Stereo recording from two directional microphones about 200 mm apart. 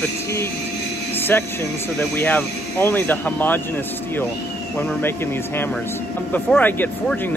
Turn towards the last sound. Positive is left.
turn(degrees=5)  # may be behind; listen again after turning